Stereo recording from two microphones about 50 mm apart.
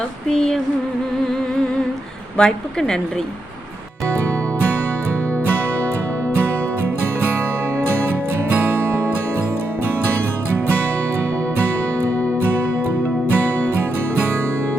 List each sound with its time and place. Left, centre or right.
0.3 s a woman's voice: centre
2.4 s a woman's voice: centre
8.5 s music: right